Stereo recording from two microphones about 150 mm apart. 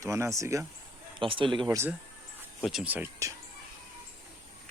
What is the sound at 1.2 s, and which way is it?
Speech, 35° right (ahead or behind).